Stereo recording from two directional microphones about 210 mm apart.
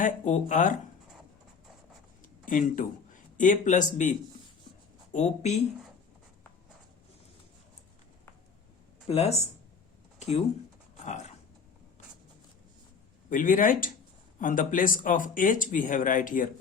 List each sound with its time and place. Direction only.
0.0 s speech: 35° left (ahead or behind)
2.2 s a sound: 40° left (ahead or behind)
5.1 s speech: 30° left (ahead or behind)
9.0 s speech: 30° left (ahead or behind)
10.2 s a sound: 30° left (ahead or behind)
13.3 s speech: 40° left (ahead or behind)